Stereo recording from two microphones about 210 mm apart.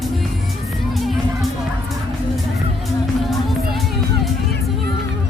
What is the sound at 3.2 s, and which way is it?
Music, centre (ahead or behind).